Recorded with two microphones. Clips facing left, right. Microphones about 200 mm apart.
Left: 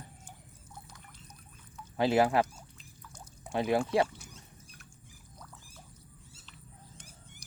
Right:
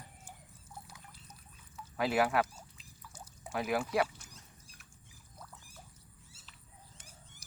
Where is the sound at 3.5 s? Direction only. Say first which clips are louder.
Left 5 dB; 30° left (ahead or behind).